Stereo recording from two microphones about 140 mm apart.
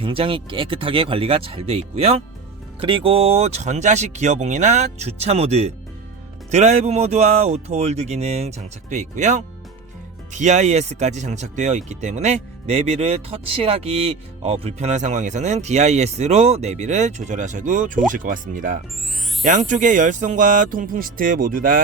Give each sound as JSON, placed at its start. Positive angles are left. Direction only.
{"t": 0.0, "sound": "speech", "side_deg": -40}